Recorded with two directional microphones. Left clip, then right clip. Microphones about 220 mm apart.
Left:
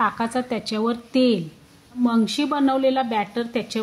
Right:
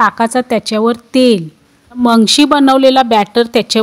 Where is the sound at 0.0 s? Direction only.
40° right (ahead or behind).